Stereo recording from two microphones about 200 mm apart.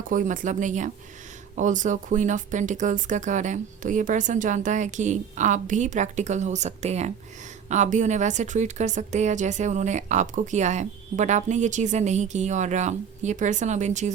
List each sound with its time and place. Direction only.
0.1 s a woman's voice: 40° right (ahead or behind)